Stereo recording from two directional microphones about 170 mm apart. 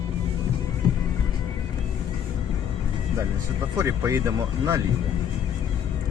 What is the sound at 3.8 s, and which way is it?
Speech, 15° right (ahead or behind).